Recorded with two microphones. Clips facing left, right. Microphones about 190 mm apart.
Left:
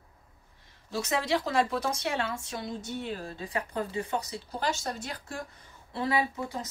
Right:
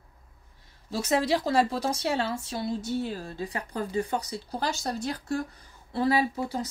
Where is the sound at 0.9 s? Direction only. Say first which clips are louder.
Right 3 dB; 35° right (ahead or behind).